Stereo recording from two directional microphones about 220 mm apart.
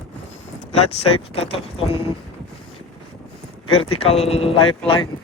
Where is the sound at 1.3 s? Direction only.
25° left (ahead or behind).